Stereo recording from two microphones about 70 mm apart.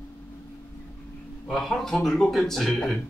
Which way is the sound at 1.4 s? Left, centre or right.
Centre.